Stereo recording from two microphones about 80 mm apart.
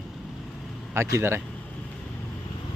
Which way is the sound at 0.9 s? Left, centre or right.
Right.